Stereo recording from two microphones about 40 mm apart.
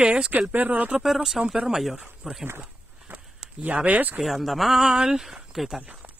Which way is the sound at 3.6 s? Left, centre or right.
Right.